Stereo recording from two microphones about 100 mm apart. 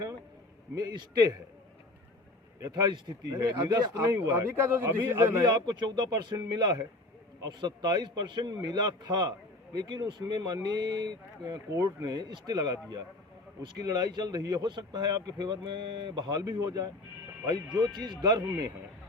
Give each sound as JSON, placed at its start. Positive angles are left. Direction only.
{"t": 0.8, "sound": "speech", "side_deg": -40}
{"t": 2.6, "sound": "speech", "side_deg": -40}
{"t": 4.0, "sound": "a man's voice", "side_deg": -30}
{"t": 5.5, "sound": "speech", "side_deg": -45}